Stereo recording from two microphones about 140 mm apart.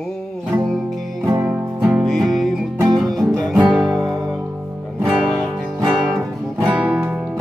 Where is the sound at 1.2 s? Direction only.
20° right (ahead or behind).